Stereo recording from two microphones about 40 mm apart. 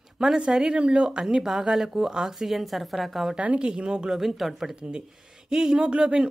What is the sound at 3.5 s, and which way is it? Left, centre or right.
Speech, right.